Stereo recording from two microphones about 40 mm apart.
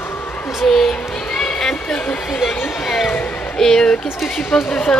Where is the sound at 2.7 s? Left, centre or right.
Centre.